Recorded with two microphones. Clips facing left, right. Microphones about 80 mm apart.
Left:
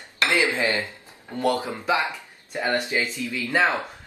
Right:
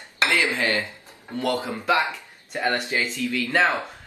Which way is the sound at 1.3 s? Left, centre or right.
Left.